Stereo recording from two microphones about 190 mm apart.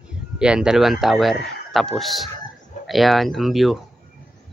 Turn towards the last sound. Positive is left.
turn(degrees=0)  # may be behind; listen again after turning